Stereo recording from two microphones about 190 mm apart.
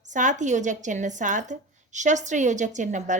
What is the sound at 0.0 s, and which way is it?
A woman's voice, 40° right (ahead or behind).